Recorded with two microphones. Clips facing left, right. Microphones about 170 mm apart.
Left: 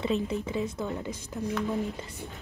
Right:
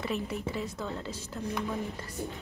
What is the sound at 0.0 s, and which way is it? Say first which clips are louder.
A woman's voice: left 4 dB; 20° left (ahead or behind).